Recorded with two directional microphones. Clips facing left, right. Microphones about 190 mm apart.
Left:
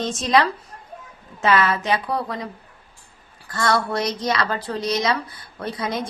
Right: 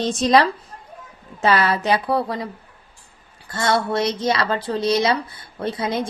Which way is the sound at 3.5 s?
25° right (ahead or behind).